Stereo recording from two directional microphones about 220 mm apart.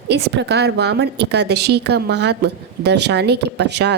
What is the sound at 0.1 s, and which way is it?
A woman's voice, 50° right (ahead or behind).